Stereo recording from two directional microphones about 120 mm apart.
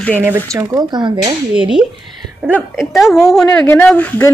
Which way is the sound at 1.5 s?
5° right (ahead or behind).